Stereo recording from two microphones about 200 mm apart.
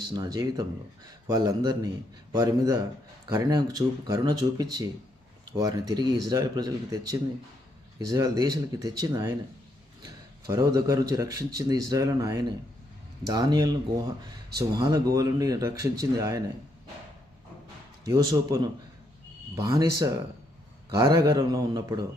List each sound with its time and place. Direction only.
0.1 s a man's voice: 20° right (ahead or behind)
14.8 s a man's voice: 20° right (ahead or behind)
18.0 s a man's voice: 20° right (ahead or behind)